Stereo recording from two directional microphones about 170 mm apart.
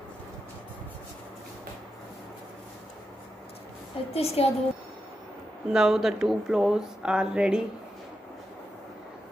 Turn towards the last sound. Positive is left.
turn(degrees=-5)  # may be behind; listen again after turning